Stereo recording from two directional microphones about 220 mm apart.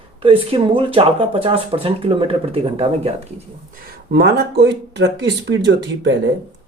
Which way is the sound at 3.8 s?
50° right (ahead or behind).